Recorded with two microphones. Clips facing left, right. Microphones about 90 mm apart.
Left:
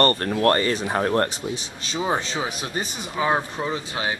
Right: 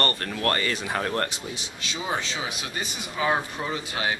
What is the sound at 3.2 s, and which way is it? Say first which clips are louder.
Speech: left 2 dB; 25° left (ahead or behind).